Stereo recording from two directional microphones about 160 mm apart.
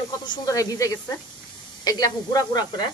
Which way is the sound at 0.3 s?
25° left (ahead or behind).